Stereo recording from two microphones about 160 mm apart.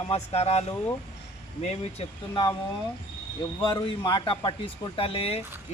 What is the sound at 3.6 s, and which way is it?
A man's voice, 30° left (ahead or behind).